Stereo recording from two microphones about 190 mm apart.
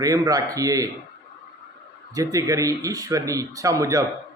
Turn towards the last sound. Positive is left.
turn(degrees=-15)  # may be behind; listen again after turning